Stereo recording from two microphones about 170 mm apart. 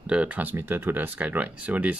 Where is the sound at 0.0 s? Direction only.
5° right (ahead or behind).